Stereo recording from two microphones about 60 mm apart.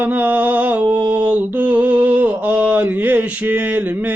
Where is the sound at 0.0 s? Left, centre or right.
Right.